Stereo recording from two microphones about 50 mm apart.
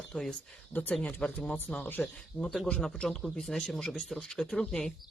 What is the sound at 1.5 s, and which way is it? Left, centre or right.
Speech, centre.